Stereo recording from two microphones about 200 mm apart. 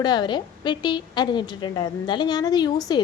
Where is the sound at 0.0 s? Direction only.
20° left (ahead or behind).